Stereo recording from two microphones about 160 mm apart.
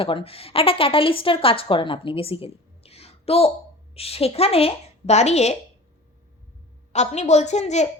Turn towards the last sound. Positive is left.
turn(degrees=45)  # may be behind; listen again after turning